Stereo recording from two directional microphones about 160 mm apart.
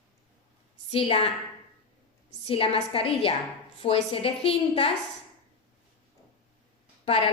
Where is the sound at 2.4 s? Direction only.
35° left (ahead or behind).